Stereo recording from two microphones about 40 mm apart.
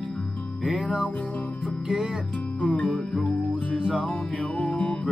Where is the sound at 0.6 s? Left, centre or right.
Right.